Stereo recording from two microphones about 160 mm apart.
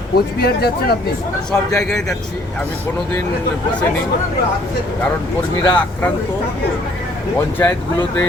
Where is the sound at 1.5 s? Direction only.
15° left (ahead or behind).